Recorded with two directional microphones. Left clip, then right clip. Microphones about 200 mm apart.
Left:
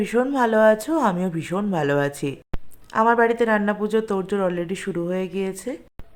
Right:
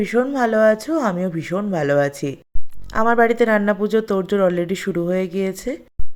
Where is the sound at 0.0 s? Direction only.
10° right (ahead or behind).